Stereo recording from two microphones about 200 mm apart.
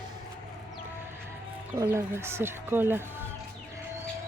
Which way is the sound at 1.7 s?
15° right (ahead or behind).